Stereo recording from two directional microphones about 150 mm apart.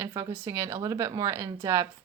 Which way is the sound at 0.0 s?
20° right (ahead or behind).